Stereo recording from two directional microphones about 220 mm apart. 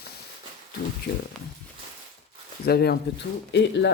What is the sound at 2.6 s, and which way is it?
Speech, 45° left (ahead or behind).